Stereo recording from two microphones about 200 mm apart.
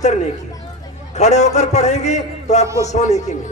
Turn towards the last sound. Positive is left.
turn(degrees=35)  # may be behind; listen again after turning